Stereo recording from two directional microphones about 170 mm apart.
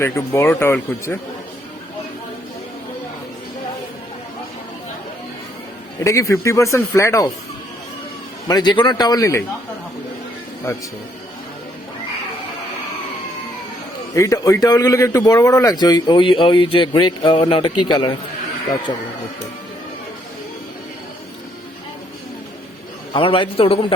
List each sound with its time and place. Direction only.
0.0 s speech: 15° left (ahead or behind)
6.0 s speech: 15° left (ahead or behind)
8.4 s speech: 25° left (ahead or behind)
14.2 s speech: 20° left (ahead or behind)
23.1 s a man's voice: 30° left (ahead or behind)